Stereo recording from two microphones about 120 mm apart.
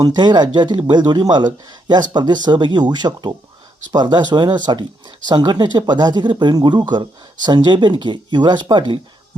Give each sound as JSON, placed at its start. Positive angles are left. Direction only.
{"t": 0.0, "sound": "speech", "side_deg": -35}